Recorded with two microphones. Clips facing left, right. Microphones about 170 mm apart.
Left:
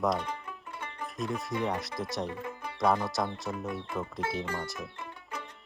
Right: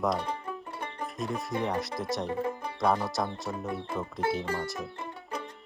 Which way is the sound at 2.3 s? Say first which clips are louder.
Right 7 dB; 35° right (ahead or behind).